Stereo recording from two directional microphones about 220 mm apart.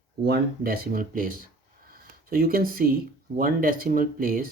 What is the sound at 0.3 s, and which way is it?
Speech, 45° right (ahead or behind).